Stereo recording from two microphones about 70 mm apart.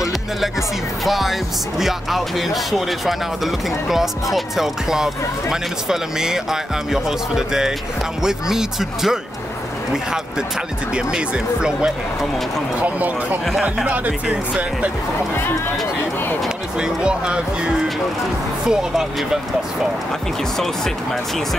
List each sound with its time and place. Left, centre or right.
1.0 s speech: centre
11.0 s speech: centre
12.8 s speech: right
13.5 s speech: centre
13.8 s speech: right
16.8 s speech: centre
20.5 s speech: centre